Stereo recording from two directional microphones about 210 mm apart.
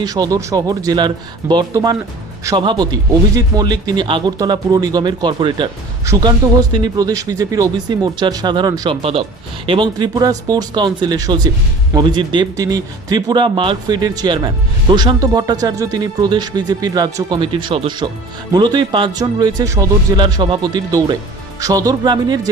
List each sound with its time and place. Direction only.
0.0 s speech: 15° right (ahead or behind)